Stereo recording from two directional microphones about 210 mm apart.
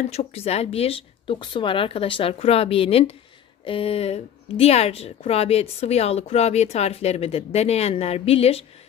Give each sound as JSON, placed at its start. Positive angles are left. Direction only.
{"t": 0.1, "sound": "a woman's voice", "side_deg": 30}